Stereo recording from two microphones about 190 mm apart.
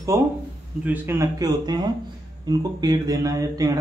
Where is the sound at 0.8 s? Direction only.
10° right (ahead or behind).